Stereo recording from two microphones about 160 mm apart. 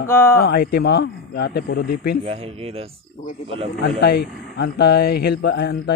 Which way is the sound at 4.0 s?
90° left.